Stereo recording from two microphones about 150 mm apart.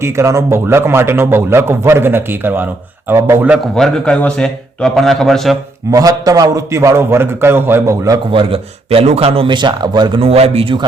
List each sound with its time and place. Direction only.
0.0 s a man's voice: 20° right (ahead or behind)
3.8 s a man's voice: 5° left (ahead or behind)
5.9 s a man's voice: 25° right (ahead or behind)
8.3 s speech: 40° right (ahead or behind)